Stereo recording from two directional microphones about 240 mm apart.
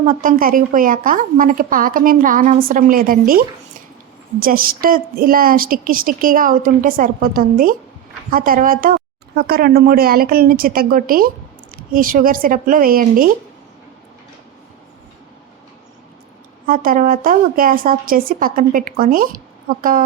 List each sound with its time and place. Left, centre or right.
0.0 s a woman's voice: right
16.6 s a woman's voice: right